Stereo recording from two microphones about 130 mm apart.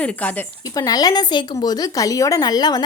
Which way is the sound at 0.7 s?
30° left (ahead or behind).